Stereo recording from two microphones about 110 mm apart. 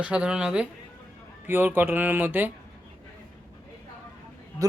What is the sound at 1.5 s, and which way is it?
Speech, 20° right (ahead or behind).